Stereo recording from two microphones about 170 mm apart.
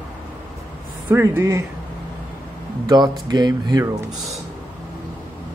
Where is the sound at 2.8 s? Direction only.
25° right (ahead or behind).